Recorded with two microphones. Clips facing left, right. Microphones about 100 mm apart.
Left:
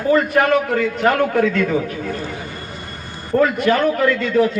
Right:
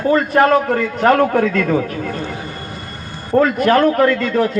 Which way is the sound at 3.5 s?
45° right (ahead or behind).